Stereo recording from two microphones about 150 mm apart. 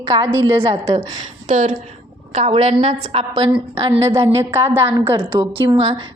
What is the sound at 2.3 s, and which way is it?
A woman's voice, 45° right (ahead or behind).